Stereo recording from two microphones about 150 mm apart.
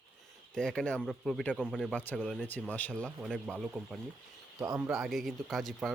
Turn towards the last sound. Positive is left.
turn(degrees=0)  # may be behind; listen again after turning